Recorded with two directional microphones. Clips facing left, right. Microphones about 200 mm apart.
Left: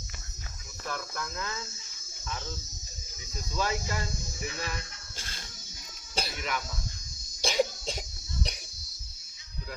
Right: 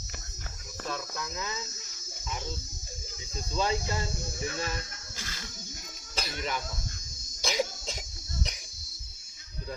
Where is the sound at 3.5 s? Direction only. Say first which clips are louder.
Right 2 dB; 20° right (ahead or behind).